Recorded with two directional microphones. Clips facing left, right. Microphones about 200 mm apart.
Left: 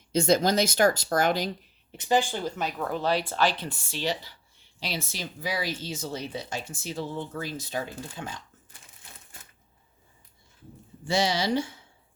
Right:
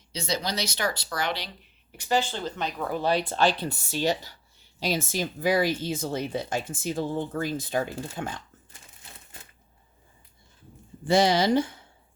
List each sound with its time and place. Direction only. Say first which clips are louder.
0.1 s speech: left 8 dB; 50° left (ahead or behind)
1.9 s speech: left 1 dB; 20° left (ahead or behind)
2.8 s speech: right 2 dB; 10° right (ahead or behind)
3.7 s speech: right 4 dB; 40° right (ahead or behind)
11.0 s speech: right 5 dB; 55° right (ahead or behind)